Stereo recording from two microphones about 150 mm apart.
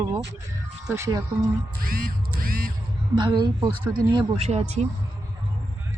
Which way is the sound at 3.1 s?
30° right (ahead or behind).